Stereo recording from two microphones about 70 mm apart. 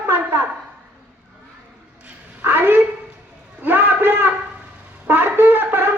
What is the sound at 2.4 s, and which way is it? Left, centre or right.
Speech, right.